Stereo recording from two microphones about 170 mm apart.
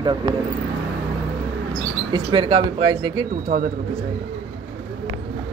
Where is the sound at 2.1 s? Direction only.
30° right (ahead or behind).